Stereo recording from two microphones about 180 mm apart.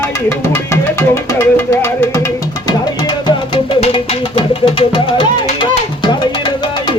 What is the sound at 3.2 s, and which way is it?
Music, 30° left (ahead or behind).